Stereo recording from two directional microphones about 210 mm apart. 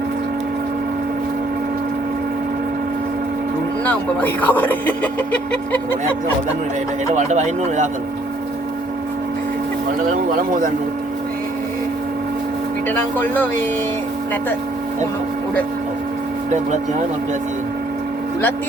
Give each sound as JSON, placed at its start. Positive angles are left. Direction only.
{"t": 3.8, "sound": "speech", "side_deg": 10}
{"t": 7.1, "sound": "speech", "side_deg": -35}
{"t": 12.9, "sound": "speech", "side_deg": 10}